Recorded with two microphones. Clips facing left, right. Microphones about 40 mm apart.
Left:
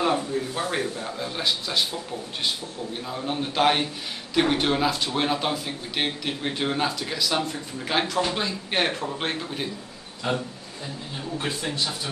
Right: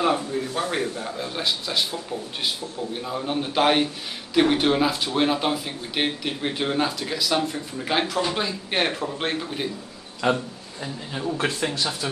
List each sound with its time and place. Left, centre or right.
0.0 s speech: centre
3.0 s speech: centre
10.2 s speech: right